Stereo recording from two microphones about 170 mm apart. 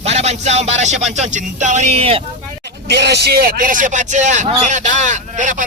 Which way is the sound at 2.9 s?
80° right.